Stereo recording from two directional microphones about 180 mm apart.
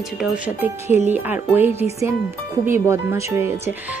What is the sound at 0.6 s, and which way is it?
Speech, 10° right (ahead or behind).